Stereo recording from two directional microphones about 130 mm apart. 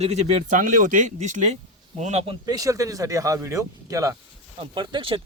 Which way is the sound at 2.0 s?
55° right (ahead or behind).